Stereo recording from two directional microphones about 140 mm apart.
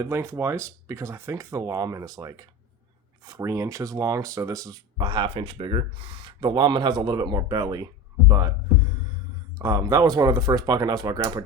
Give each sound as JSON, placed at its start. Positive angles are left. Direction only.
{"t": 0.0, "sound": "speech", "side_deg": -15}
{"t": 9.6, "sound": "speech", "side_deg": -25}